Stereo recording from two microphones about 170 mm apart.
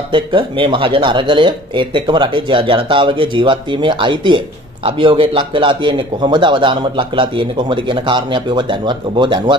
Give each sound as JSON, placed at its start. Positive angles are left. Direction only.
{"t": 0.1, "sound": "a man's voice", "side_deg": -30}